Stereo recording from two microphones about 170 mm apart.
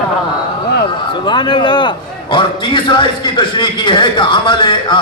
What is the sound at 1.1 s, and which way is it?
A man's voice, 30° left (ahead or behind).